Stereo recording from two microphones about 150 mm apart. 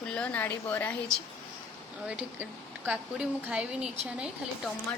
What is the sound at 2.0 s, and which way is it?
Speech, 10° right (ahead or behind).